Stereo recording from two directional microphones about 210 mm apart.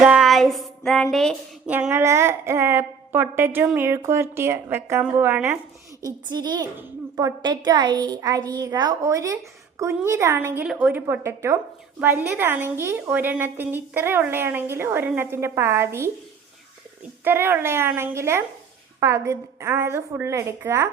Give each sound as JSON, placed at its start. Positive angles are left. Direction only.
{"t": 0.0, "sound": "child singing", "side_deg": -5}
{"t": 1.1, "sound": "speech", "side_deg": 0}
{"t": 1.7, "sound": "a woman's voice", "side_deg": -10}
{"t": 17.2, "sound": "a woman's voice", "side_deg": -10}